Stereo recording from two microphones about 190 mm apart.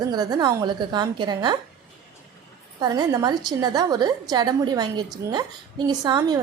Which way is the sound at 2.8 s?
20° right (ahead or behind).